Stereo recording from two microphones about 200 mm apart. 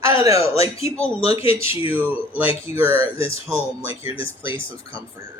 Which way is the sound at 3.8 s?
30° left (ahead or behind).